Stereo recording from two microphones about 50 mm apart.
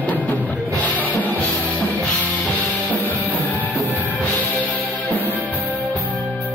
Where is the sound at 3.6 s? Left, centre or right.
Left.